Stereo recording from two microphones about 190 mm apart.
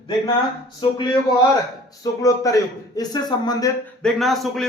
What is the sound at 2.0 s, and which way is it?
A man's voice, 20° left (ahead or behind).